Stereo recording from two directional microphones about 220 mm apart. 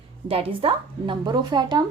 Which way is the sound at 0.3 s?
25° right (ahead or behind).